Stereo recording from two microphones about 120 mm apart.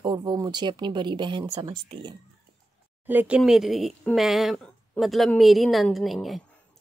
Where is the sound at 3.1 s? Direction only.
15° right (ahead or behind).